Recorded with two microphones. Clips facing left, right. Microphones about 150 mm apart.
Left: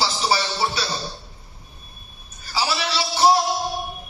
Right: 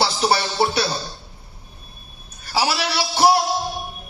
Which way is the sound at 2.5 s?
65° right (ahead or behind).